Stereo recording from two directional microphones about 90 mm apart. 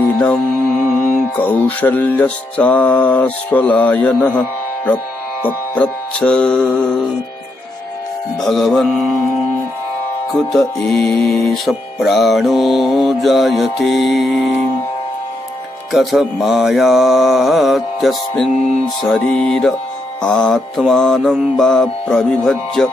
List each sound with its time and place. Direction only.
0.7 s mantra: 20° right (ahead or behind)
1.3 s music: 15° left (ahead or behind)
8.5 s mantra: centre (ahead or behind)
10.5 s mantra: 5° left (ahead or behind)
15.9 s mantra: centre (ahead or behind)
19.0 s music: 5° left (ahead or behind)
20.2 s mantra: 10° left (ahead or behind)
21.2 s mantra: 5° right (ahead or behind)
21.5 s music: 5° left (ahead or behind)